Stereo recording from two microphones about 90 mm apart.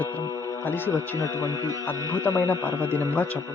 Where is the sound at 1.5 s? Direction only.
40° right (ahead or behind).